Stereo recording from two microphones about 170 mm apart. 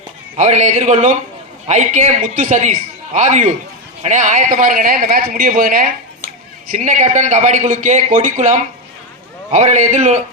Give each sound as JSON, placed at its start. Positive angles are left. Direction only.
{"t": 0.3, "sound": "a man's voice", "side_deg": -45}